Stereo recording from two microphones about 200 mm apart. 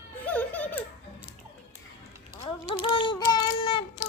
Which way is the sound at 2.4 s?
25° left (ahead or behind).